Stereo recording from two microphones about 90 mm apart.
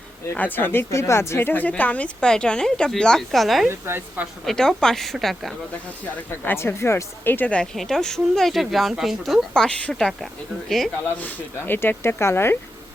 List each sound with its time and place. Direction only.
0.3 s speech: 20° left (ahead or behind); by 3.7 s centre (ahead or behind)
3.7 s a woman's voice: 25° right (ahead or behind)
4.4 s speech: 5° left (ahead or behind)
6.4 s speech: 25° left (ahead or behind); by 10.2 s 5° left (ahead or behind)
11.0 s speech: 20° left (ahead or behind)